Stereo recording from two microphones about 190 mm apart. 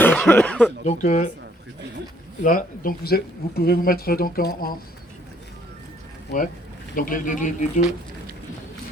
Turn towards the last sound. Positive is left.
turn(degrees=40)  # may be behind; listen again after turning